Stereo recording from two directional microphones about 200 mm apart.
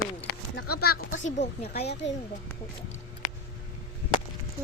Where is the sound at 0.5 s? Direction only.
50° left (ahead or behind).